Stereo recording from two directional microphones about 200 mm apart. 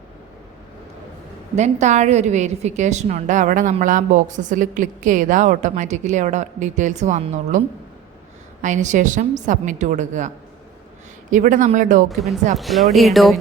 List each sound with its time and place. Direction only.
1.5 s a woman's voice: 35° right (ahead or behind)
8.6 s a woman's voice: 35° right (ahead or behind)
12.0 s speech: centre (ahead or behind)